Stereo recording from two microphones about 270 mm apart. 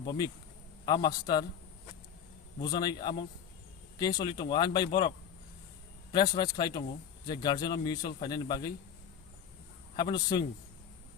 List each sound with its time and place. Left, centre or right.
0.0 s a man's voice: centre
2.7 s a man's voice: centre
9.9 s a man's voice: centre